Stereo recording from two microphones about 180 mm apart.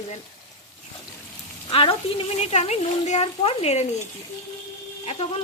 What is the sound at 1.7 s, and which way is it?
Speech, 30° left (ahead or behind).